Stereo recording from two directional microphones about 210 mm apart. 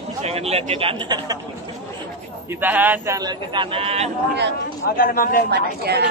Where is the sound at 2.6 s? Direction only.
10° right (ahead or behind); by 4.1 s 30° right (ahead or behind).